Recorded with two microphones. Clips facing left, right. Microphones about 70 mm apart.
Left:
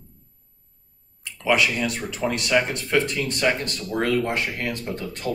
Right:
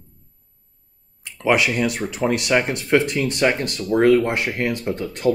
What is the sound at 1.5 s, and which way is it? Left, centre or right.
Speech, centre.